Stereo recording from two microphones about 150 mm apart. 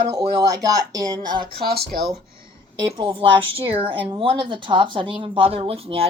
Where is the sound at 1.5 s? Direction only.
90° right.